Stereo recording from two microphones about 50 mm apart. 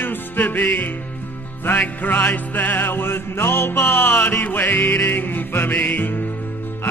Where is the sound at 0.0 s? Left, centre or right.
Left.